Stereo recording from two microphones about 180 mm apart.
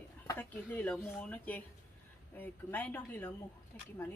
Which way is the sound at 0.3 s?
10° left (ahead or behind).